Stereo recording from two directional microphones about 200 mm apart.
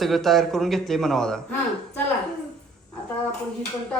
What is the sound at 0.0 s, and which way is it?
A child's voice, centre (ahead or behind).